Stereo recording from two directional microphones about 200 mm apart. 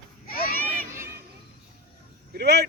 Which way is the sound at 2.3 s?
55° right (ahead or behind).